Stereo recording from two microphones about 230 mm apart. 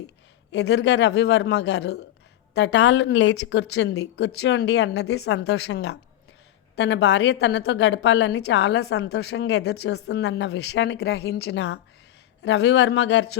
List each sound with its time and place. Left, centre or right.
0.5 s a woman's voice: left